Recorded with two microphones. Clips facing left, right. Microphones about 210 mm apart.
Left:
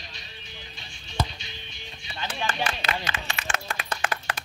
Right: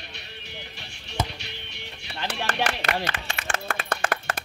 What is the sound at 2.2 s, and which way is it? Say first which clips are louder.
Music: right 2 dB; 70° right (ahead or behind).